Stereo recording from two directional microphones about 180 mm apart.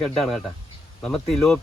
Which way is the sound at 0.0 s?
Centre (ahead or behind).